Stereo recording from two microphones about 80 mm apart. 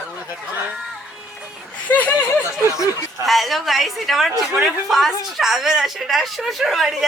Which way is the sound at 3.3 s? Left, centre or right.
Centre.